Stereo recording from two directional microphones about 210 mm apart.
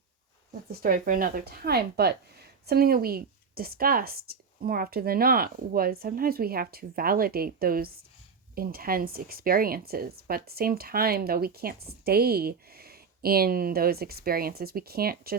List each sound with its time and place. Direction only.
0.7 s speech: 45° right (ahead or behind)